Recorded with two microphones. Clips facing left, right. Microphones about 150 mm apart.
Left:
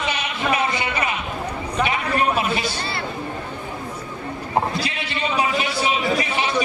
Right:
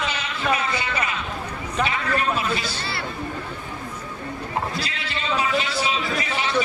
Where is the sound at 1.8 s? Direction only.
20° left (ahead or behind).